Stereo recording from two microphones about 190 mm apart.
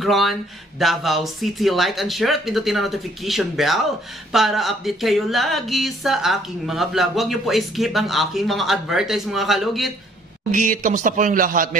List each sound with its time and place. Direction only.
0.0 s speech: centre (ahead or behind)
10.5 s a man's voice: 45° right (ahead or behind)